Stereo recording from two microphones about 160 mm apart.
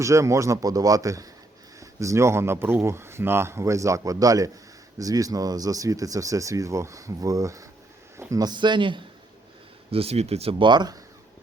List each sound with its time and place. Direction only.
0.0 s speech: 20° right (ahead or behind)